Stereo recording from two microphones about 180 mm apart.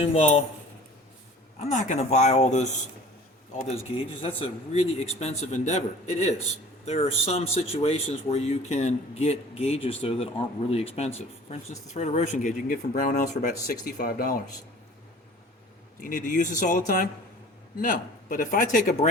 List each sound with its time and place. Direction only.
0.0 s speech: 35° left (ahead or behind)
1.7 s speech: 40° left (ahead or behind)
4.2 s speech: 30° left (ahead or behind)
13.3 s speech: 55° left (ahead or behind)
16.0 s speech: 50° left (ahead or behind)